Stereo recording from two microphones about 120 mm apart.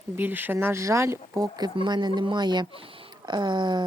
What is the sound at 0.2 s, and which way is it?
Speech, 15° right (ahead or behind).